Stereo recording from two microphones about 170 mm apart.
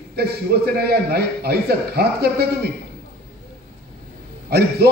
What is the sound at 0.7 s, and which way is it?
A man's voice, 65° right (ahead or behind).